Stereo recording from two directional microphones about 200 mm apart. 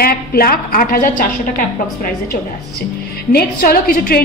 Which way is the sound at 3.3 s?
50° left (ahead or behind).